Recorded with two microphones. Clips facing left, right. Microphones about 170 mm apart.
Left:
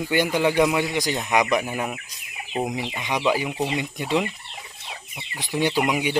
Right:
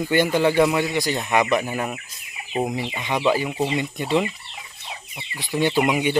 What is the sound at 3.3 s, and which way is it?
Speech, 10° left (ahead or behind).